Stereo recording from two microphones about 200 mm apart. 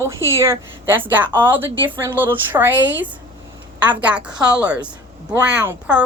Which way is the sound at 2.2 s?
10° right (ahead or behind).